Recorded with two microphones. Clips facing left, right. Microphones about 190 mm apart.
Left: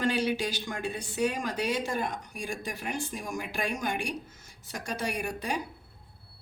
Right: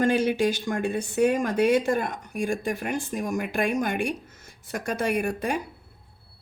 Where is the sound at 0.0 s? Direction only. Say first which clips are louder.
Right 6 dB; 50° right (ahead or behind).